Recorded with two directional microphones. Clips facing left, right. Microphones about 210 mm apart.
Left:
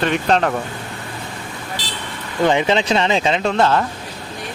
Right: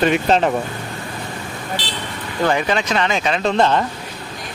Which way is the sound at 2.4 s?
20° left (ahead or behind).